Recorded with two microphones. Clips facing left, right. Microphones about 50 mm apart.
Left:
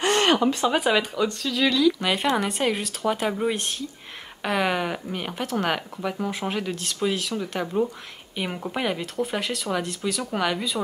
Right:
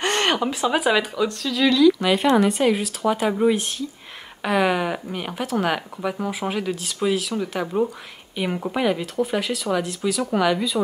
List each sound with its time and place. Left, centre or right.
0.0 s a sound: right
0.4 s speech: centre
8.4 s speech: centre